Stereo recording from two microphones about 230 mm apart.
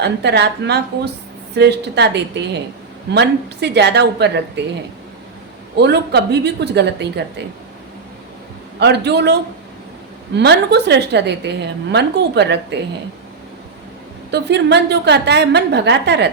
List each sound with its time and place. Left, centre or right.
0.0 s a woman's voice: right
5.7 s a woman's voice: right
8.8 s a woman's voice: right
14.3 s a woman's voice: right